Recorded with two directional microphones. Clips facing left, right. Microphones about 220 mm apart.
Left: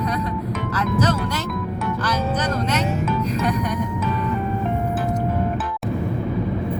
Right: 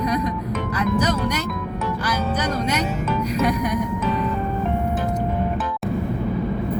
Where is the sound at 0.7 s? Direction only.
15° right (ahead or behind).